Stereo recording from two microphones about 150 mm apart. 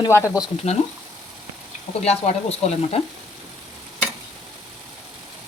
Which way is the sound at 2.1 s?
45° left (ahead or behind).